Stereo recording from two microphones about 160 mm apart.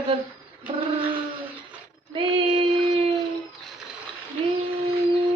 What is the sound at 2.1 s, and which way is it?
Child singing, 35° right (ahead or behind).